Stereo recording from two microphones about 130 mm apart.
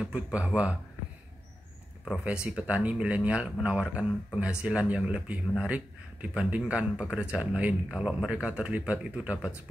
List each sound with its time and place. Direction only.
0.0 s speech: 10° right (ahead or behind)
2.0 s speech: 5° right (ahead or behind)